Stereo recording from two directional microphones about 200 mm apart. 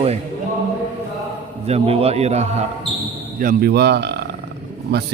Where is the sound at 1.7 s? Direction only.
30° right (ahead or behind).